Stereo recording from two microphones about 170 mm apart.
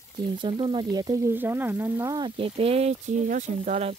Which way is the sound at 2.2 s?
35° right (ahead or behind).